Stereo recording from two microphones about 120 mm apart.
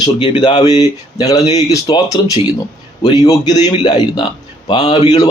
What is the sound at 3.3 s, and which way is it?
Speech, 35° left (ahead or behind).